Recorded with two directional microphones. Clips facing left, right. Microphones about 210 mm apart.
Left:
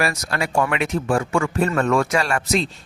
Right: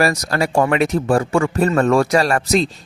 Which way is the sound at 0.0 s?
40° right (ahead or behind).